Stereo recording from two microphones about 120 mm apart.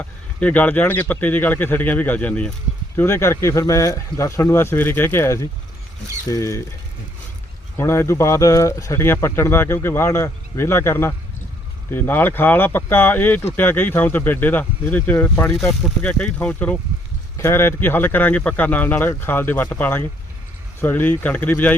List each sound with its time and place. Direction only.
0.0 s speech: 15° left (ahead or behind)
7.8 s speech: 20° left (ahead or behind)